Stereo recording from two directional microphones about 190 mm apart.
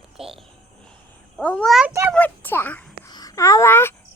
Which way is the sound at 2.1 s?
10° left (ahead or behind).